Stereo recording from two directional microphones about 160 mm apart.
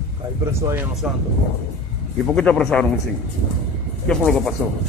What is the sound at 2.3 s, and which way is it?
Speech, 5° left (ahead or behind).